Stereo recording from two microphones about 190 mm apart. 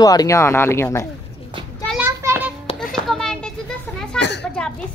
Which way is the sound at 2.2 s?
10° right (ahead or behind).